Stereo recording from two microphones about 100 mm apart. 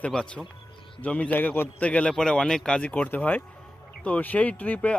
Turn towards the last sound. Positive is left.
turn(degrees=15)  # may be behind; listen again after turning